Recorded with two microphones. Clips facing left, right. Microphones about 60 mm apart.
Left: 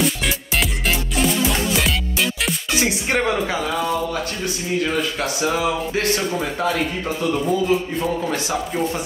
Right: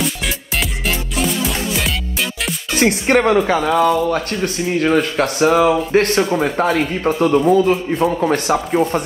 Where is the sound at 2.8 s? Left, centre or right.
Right.